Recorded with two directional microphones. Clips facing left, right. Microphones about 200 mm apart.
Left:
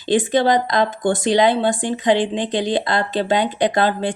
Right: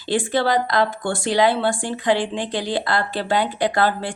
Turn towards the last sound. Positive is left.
turn(degrees=20)  # may be behind; listen again after turning